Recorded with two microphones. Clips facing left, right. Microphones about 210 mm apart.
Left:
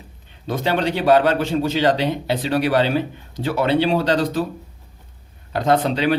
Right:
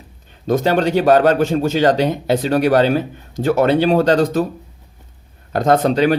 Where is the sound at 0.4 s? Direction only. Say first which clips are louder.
Right 5 dB; 45° right (ahead or behind).